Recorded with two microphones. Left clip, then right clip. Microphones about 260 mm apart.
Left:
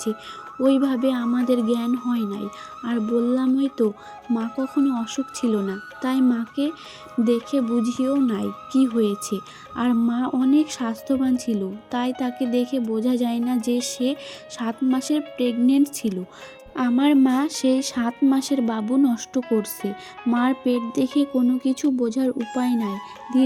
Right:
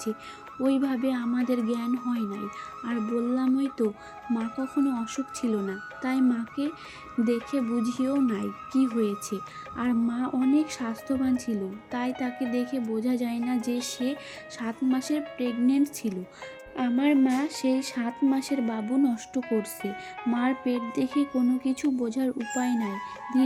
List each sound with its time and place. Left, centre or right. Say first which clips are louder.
0.6 s speech: left 7 dB; left